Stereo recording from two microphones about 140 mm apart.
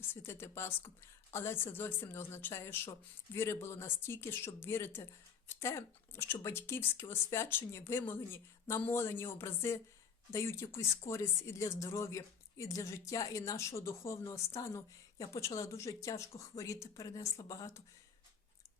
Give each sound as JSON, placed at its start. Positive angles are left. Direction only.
{"t": 0.1, "sound": "speech", "side_deg": 15}